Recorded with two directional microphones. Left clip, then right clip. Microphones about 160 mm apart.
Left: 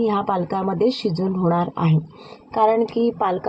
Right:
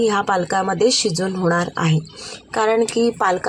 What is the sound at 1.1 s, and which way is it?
Speech, 25° right (ahead or behind).